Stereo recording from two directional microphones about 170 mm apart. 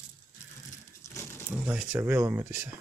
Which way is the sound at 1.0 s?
15° left (ahead or behind).